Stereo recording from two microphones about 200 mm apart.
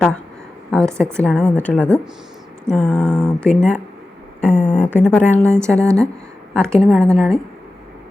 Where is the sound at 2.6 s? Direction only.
5° left (ahead or behind).